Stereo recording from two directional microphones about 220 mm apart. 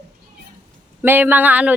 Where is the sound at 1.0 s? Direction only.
10° right (ahead or behind).